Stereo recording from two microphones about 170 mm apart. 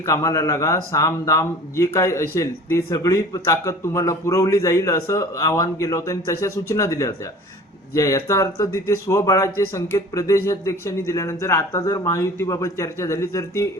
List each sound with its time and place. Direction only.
0.0 s speech: 20° left (ahead or behind)